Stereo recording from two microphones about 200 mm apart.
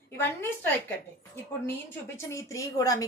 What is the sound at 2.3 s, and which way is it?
Speech, 15° left (ahead or behind).